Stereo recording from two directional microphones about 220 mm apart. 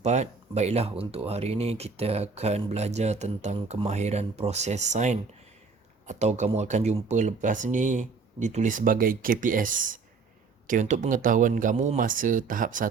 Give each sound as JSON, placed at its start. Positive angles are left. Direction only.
{"t": 0.0, "sound": "speech", "side_deg": -30}